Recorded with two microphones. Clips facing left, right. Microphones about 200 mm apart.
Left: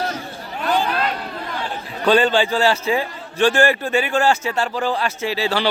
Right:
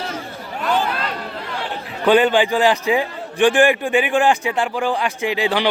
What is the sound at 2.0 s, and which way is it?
A man's voice, 15° right (ahead or behind).